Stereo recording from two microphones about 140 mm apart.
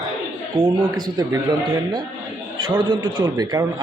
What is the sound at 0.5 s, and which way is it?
A man's voice, 30° right (ahead or behind).